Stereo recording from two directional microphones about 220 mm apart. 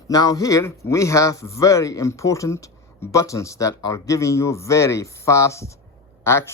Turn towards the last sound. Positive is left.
turn(degrees=10)  # may be behind; listen again after turning